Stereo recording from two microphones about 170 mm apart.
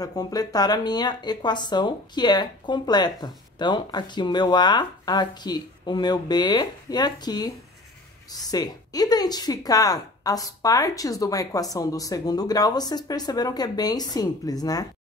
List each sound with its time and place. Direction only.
0.0 s speech: 20° left (ahead or behind)